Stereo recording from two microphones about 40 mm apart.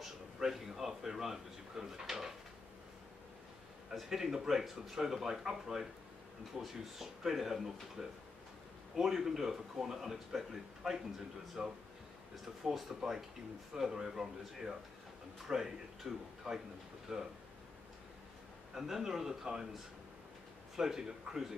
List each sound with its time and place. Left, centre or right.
0.4 s speech: centre
4.1 s speech: centre
18.8 s speech: centre
20.7 s speech: centre